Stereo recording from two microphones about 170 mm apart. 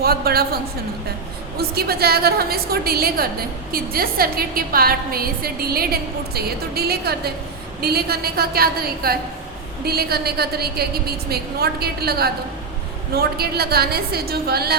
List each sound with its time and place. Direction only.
0.0 s a woman's voice: 65° right (ahead or behind)